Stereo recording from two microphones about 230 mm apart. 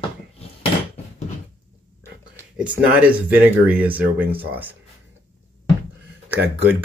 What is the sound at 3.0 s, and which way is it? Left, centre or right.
Speech, centre.